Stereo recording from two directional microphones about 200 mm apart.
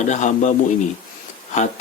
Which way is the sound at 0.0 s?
40° left (ahead or behind).